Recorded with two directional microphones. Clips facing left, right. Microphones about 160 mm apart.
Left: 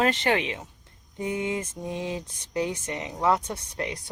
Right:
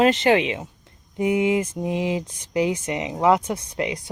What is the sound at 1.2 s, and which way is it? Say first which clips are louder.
Speech: right 9 dB; 90° right.